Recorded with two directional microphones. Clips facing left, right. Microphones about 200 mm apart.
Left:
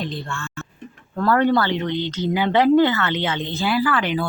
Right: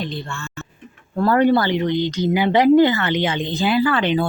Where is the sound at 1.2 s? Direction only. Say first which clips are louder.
Right 2 dB; 15° right (ahead or behind).